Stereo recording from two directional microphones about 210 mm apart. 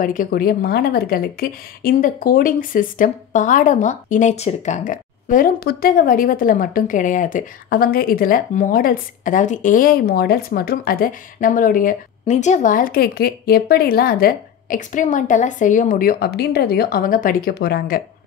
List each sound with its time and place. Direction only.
0.0 s a woman's voice: 40° left (ahead or behind)